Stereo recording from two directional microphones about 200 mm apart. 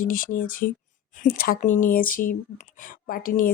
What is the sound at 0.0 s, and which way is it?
Speech, 45° left (ahead or behind).